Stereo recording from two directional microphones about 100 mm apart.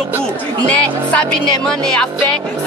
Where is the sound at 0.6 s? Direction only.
15° left (ahead or behind).